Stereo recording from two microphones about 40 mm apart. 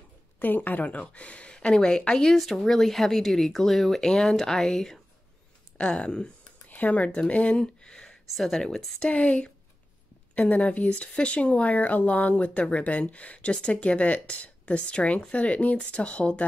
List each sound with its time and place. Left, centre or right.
0.4 s speech: left; by 2.3 s centre
2.3 s speech: centre
4.0 s speech: centre
5.8 s speech: left
6.7 s speech: left
7.2 s speech: left; by 8.8 s centre
9.1 s speech: left